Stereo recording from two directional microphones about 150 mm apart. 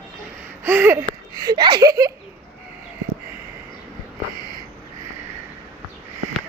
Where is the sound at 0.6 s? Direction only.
15° right (ahead or behind).